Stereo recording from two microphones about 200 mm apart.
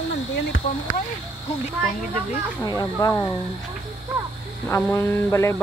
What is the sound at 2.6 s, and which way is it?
Speech, 20° left (ahead or behind).